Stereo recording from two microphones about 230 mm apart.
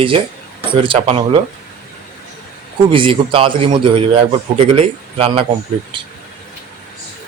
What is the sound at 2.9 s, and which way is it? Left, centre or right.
Speech, right.